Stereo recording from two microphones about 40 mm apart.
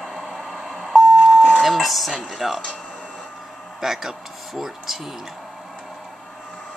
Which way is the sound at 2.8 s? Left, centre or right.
Centre.